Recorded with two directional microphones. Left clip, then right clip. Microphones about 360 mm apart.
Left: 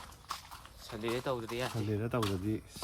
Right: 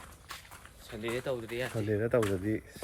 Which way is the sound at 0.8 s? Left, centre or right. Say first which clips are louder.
Right 1 dB; centre.